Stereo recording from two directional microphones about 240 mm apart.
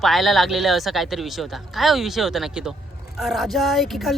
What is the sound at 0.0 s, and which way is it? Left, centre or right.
Speech, centre.